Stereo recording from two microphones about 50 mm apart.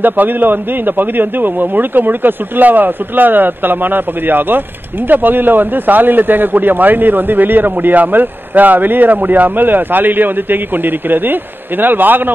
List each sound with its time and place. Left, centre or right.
0.0 s a man's voice: right